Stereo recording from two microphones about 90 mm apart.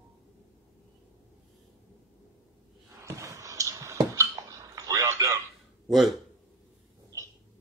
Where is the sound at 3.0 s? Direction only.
35° right (ahead or behind).